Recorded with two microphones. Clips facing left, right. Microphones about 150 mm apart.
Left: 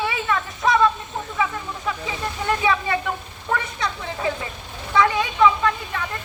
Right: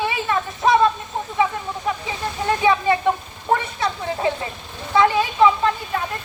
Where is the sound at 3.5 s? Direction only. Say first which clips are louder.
Right 4 dB; 30° right (ahead or behind).